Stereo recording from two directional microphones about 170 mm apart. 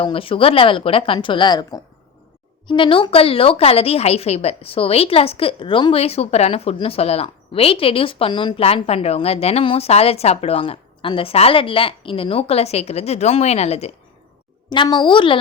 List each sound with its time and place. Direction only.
0.0 s a woman's voice: 30° left (ahead or behind)
14.7 s a child's voice: 25° left (ahead or behind)